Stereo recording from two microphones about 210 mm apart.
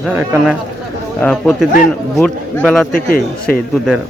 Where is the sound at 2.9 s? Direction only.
45° left (ahead or behind).